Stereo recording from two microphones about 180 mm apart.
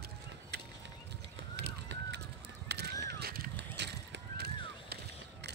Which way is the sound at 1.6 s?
70° right (ahead or behind).